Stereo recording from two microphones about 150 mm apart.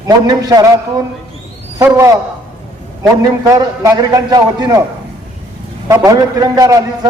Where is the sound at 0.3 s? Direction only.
25° right (ahead or behind).